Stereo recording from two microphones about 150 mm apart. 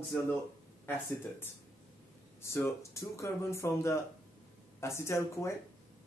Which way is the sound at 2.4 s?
15° left (ahead or behind).